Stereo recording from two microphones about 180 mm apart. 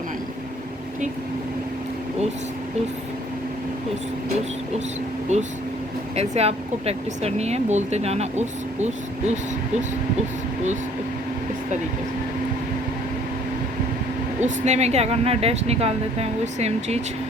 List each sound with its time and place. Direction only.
5.3 s speech: 40° right (ahead or behind)
14.4 s speech: 40° right (ahead or behind)